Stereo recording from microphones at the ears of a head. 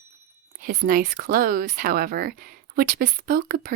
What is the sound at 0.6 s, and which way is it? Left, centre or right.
Speech, right.